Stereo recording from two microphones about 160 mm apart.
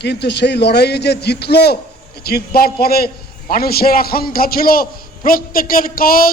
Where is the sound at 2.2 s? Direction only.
75° left (ahead or behind).